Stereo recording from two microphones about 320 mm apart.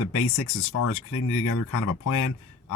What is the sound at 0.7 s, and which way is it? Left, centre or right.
Speech, left.